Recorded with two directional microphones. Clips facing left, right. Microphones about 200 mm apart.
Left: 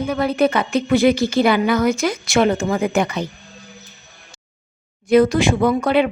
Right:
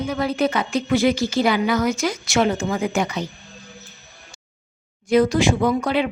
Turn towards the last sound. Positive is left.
turn(degrees=60)  # may be behind; listen again after turning